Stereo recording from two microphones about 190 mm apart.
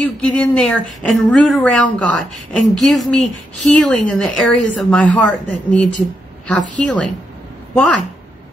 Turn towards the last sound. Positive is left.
turn(degrees=5)  # may be behind; listen again after turning